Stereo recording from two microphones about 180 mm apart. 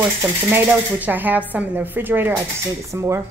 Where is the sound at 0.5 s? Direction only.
10° right (ahead or behind).